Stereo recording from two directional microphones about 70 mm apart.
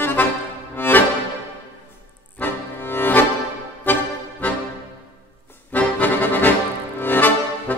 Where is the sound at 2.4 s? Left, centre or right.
Left.